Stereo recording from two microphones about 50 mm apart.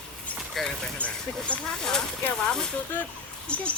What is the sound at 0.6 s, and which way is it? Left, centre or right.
Speech, centre.